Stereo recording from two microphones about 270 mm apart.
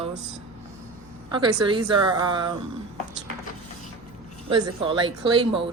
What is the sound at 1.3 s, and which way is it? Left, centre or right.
A woman's voice, centre.